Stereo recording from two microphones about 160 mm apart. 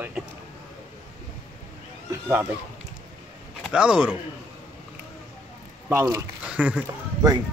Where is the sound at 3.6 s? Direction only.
5° right (ahead or behind).